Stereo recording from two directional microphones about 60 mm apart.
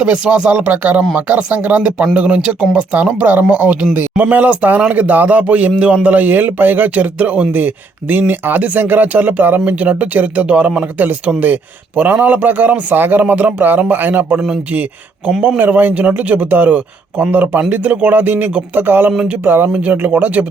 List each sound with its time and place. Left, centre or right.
0.0 s speech: centre